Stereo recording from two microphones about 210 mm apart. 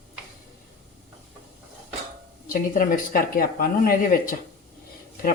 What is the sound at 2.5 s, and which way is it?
Speech, 40° left (ahead or behind).